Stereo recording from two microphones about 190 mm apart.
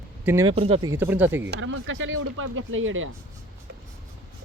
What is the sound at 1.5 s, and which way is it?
Speech, 85° right.